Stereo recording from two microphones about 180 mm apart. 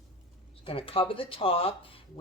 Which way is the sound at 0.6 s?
30° left (ahead or behind).